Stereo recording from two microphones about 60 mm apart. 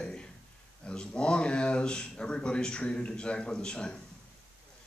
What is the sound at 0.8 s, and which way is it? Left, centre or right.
Speech, centre.